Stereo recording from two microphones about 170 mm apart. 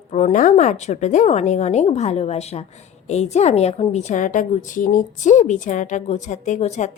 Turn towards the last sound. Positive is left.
turn(degrees=45)  # may be behind; listen again after turning